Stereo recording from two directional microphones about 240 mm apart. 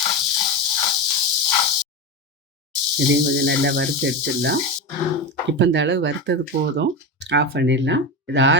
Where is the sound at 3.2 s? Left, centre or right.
Right.